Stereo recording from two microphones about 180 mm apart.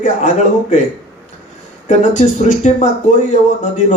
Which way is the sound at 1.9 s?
40° left (ahead or behind).